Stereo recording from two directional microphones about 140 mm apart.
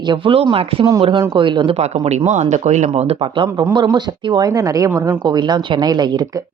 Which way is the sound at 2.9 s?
40° right (ahead or behind).